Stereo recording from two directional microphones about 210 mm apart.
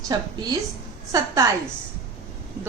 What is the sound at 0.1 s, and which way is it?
A woman's voice, 20° right (ahead or behind).